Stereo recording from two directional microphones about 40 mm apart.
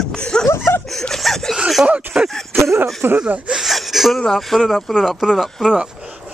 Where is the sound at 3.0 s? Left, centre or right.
Right.